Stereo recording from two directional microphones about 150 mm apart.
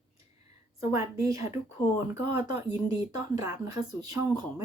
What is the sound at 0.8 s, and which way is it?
Speech, 20° right (ahead or behind).